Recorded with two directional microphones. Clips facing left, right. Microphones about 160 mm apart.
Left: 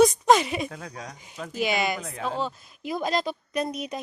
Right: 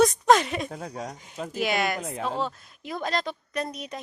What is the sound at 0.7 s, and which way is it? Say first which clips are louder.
Speech: right 4 dB; 30° right (ahead or behind).